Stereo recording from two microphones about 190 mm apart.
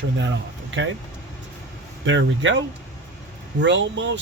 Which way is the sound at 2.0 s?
75° right (ahead or behind).